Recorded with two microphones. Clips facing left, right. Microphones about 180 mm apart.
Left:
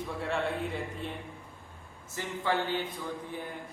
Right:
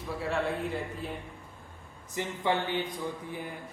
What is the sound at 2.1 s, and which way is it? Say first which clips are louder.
Speech: right 1 dB; 20° right (ahead or behind).